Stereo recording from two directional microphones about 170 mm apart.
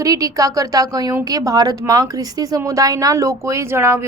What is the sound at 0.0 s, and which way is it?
A woman's voice, 20° right (ahead or behind).